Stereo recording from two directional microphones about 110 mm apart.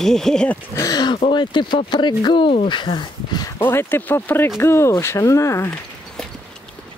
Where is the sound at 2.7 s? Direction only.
45° left (ahead or behind).